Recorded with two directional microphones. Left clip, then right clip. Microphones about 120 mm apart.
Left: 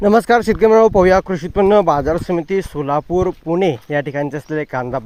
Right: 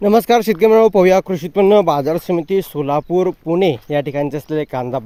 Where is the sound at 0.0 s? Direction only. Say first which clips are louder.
Even; centre (ahead or behind).